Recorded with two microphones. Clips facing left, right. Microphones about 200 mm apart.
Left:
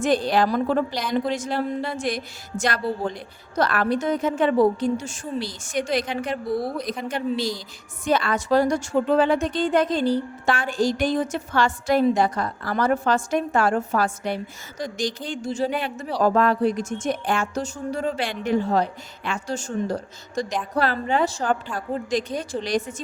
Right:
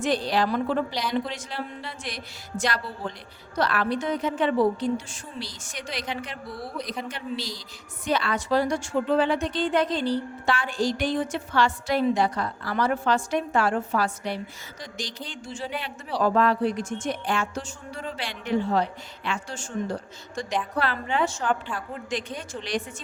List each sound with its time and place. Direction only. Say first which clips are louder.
0.0 s a woman's voice: left 4 dB; 50° left (ahead or behind)